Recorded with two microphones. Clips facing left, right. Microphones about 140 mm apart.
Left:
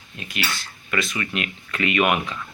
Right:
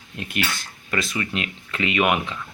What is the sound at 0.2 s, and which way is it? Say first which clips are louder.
Speech: right 2 dB; 55° right (ahead or behind).